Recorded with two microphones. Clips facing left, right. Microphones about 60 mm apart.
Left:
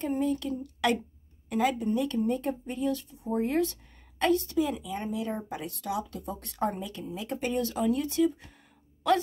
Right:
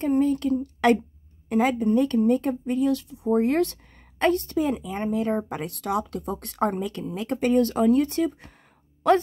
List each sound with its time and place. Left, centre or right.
0.1 s a woman's voice: right
0.8 s speech: right
1.8 s a woman's voice: right
4.2 s a woman's voice: right